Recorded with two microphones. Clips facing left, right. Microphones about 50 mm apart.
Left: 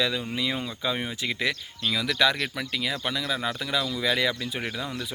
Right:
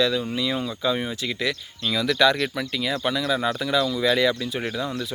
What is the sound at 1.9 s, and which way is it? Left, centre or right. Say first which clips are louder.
Speech: right 4 dB; centre.